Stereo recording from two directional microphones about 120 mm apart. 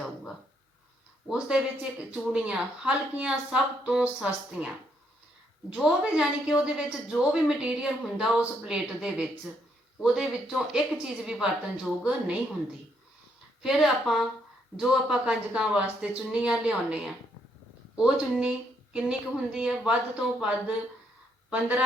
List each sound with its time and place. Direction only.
1.3 s a woman's voice: 5° right (ahead or behind)
5.7 s a woman's voice: 5° right (ahead or behind)
13.6 s a woman's voice: centre (ahead or behind)
19.5 s a woman's voice: 5° right (ahead or behind)